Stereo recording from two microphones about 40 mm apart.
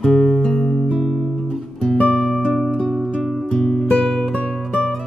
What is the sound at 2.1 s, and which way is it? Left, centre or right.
Music, centre.